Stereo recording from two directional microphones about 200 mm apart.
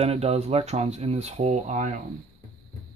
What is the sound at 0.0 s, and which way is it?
Speech, 30° right (ahead or behind).